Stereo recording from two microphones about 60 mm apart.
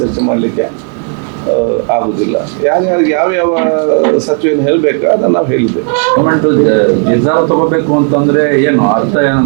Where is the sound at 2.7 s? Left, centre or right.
Right.